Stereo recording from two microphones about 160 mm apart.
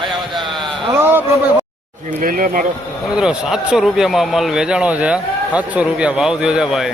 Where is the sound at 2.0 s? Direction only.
60° right (ahead or behind).